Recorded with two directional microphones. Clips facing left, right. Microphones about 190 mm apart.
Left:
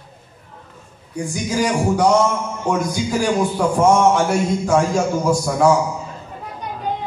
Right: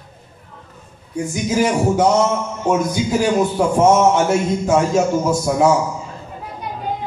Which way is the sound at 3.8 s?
25° right (ahead or behind).